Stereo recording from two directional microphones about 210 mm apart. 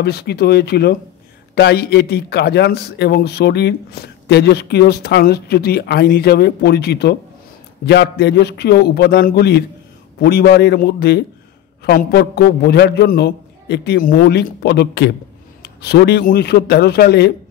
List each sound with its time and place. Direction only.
0.0 s speech: 50° left (ahead or behind)